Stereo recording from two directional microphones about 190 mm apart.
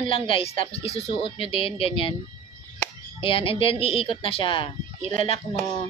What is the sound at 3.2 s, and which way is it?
A woman's voice, 30° left (ahead or behind).